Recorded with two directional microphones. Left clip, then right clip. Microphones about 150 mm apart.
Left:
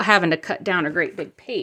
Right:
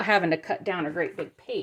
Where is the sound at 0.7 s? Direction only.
85° left.